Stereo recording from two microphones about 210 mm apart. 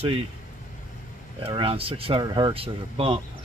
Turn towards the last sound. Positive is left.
turn(degrees=-25)  # may be behind; listen again after turning